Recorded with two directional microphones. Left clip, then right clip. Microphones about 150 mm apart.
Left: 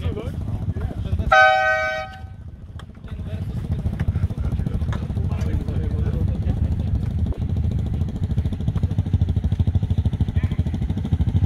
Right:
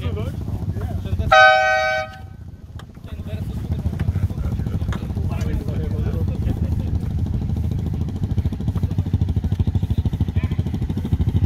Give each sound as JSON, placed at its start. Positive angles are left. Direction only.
{"t": 1.3, "sound": "a sound", "side_deg": -70}
{"t": 4.8, "sound": "vehicle", "side_deg": -65}
{"t": 7.7, "sound": "vehicle", "side_deg": 25}